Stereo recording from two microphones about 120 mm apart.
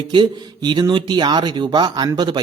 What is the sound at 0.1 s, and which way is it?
Speech, 40° right (ahead or behind).